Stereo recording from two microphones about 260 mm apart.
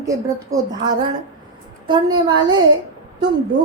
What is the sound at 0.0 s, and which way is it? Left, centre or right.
Female singing, centre.